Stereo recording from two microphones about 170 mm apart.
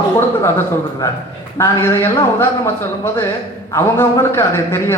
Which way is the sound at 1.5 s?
15° left (ahead or behind).